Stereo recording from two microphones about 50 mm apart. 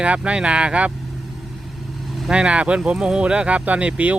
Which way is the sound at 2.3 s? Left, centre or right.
Right.